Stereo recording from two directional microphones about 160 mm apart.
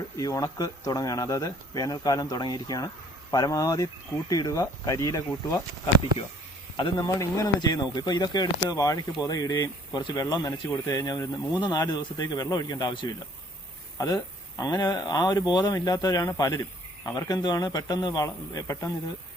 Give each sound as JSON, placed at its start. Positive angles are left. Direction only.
{"t": 0.2, "sound": "speech", "side_deg": 20}
{"t": 14.6, "sound": "speech", "side_deg": 25}